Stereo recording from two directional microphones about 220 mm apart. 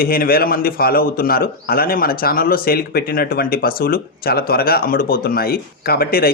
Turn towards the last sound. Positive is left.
turn(degrees=45)  # may be behind; listen again after turning